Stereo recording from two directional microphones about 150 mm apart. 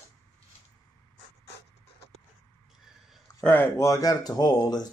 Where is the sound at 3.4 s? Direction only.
15° left (ahead or behind).